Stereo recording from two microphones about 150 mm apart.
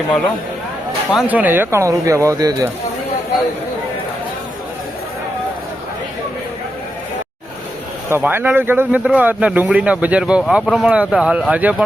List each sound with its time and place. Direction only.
1.1 s speech: 10° right (ahead or behind)
8.1 s speech: 15° right (ahead or behind)